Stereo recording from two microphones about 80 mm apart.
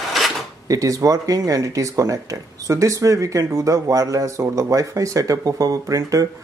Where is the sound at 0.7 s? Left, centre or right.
Right.